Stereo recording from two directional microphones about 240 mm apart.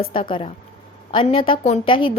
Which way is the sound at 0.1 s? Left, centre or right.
Left.